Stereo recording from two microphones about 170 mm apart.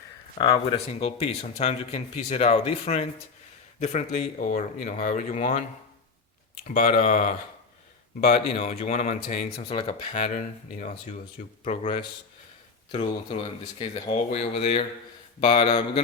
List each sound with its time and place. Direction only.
0.3 s speech: 25° left (ahead or behind); by 5.6 s 45° left (ahead or behind)
6.7 s speech: 55° left (ahead or behind)
8.2 s speech: 40° left (ahead or behind)
11.6 s speech: 35° left (ahead or behind)